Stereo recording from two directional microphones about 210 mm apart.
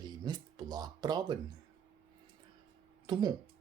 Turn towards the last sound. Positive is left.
turn(degrees=-20)  # may be behind; listen again after turning